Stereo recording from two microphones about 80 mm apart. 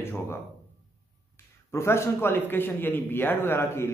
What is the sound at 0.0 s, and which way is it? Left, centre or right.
Speech, left.